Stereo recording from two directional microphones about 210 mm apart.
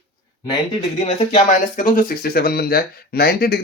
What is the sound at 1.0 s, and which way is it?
Speech, 30° left (ahead or behind).